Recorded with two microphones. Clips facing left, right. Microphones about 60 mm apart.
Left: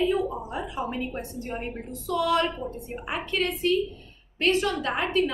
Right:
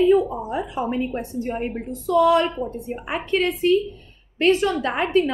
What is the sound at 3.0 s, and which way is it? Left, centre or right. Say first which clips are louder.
A woman's voice: right 6 dB; right.